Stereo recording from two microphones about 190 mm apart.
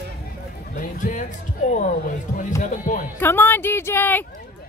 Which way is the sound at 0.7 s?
45° left (ahead or behind).